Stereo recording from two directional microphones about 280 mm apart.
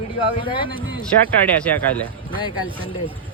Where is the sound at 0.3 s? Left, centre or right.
Centre.